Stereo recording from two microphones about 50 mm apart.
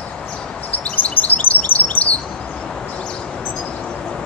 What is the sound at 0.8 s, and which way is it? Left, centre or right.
Chirp, left.